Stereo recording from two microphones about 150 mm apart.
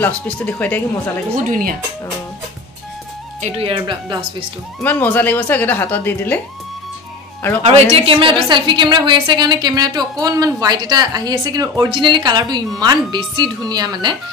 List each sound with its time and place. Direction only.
0.0 s speech: 10° left (ahead or behind)
1.5 s speech: 70° right (ahead or behind)
3.3 s speech: 50° right (ahead or behind)
3.6 s speech: 35° right (ahead or behind)
4.8 s speech: 10° left (ahead or behind)
7.6 s a woman's voice: 45° right (ahead or behind); by 14.1 s 25° right (ahead or behind)